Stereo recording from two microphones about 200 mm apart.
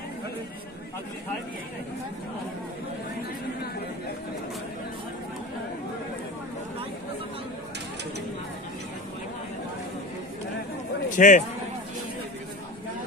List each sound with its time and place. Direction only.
11.1 s a man's voice: 40° left (ahead or behind)